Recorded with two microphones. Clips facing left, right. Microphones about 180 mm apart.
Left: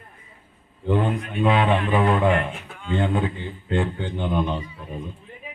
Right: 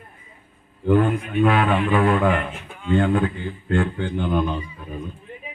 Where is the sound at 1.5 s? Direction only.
25° left (ahead or behind).